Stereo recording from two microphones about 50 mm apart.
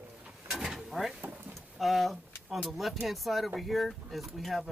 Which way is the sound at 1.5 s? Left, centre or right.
Centre.